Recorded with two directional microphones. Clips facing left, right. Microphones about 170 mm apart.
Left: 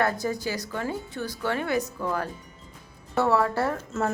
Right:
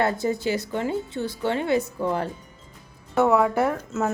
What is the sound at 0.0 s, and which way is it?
Speech, 25° right (ahead or behind).